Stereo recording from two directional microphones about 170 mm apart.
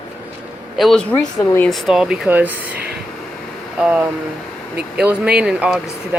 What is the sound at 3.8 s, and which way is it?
Speech, 5° right (ahead or behind).